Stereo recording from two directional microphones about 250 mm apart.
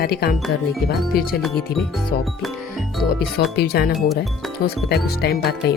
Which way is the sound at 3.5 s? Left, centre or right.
Left.